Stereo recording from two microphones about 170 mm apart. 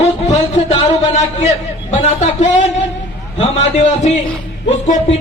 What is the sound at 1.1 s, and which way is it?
A man's voice, 40° left (ahead or behind).